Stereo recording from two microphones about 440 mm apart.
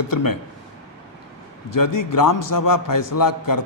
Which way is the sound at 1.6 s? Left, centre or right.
Left.